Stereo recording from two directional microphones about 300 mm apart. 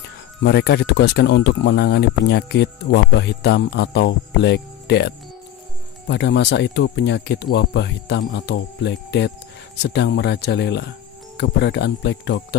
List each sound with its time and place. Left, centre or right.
0.0 s speech: left